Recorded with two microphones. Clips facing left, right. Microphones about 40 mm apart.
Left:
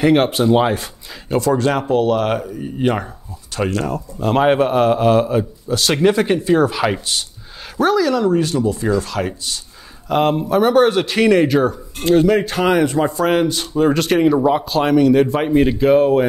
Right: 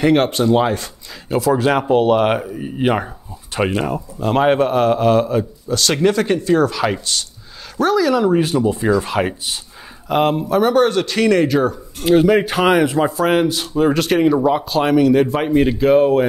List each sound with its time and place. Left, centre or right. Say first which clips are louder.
0.0 s a man's voice: left 1 dB; centre
1.3 s speech: right 1 dB; centre
4.2 s a man's voice: even; centre; by 9.6 s right
10.0 s a man's voice: even; centre
12.0 s a man's voice: right 1 dB; centre